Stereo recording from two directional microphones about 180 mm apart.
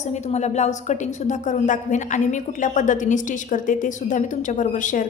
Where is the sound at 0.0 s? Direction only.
40° left (ahead or behind).